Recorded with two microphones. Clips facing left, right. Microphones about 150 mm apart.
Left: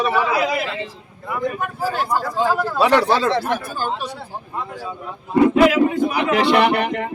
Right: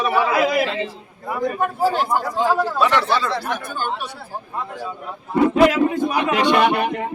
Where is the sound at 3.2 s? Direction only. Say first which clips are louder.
Left 5 dB; 50° left (ahead or behind).